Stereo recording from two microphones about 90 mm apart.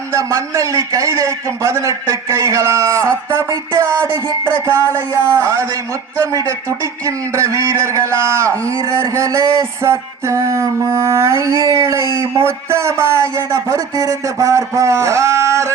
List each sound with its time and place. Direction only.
0.1 s a man's voice: 35° right (ahead or behind)